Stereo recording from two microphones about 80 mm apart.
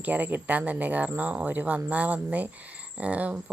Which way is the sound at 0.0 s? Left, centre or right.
Centre.